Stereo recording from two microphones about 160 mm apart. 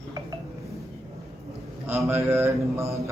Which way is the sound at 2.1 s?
15° right (ahead or behind).